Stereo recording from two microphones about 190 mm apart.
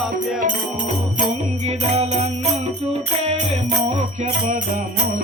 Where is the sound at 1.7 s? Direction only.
35° right (ahead or behind).